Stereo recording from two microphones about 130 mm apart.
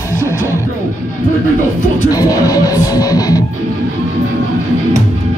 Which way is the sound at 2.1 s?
30° left (ahead or behind).